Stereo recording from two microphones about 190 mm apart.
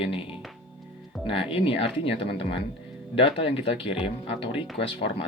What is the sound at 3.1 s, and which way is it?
Speech, 30° left (ahead or behind).